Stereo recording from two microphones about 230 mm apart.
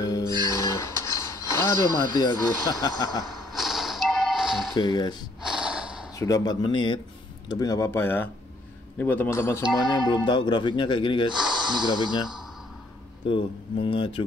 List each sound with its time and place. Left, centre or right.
0.0 s music: centre
3.3 s a sound: centre
4.7 s speech: centre
5.6 s gasp: centre
6.1 s speech: centre
11.8 s speech: centre
13.3 s speech: left